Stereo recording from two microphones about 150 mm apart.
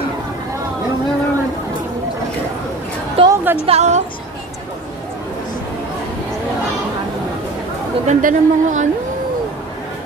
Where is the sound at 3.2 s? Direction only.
40° right (ahead or behind).